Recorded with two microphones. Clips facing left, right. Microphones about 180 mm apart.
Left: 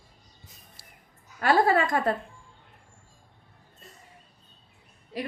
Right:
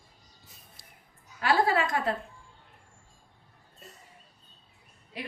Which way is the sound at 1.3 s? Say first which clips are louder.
Left 3 dB; 50° left (ahead or behind).